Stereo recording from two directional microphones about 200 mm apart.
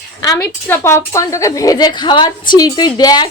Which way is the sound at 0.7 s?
15° left (ahead or behind).